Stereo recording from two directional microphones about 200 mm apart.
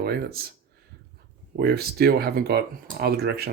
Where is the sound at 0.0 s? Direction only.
50° right (ahead or behind).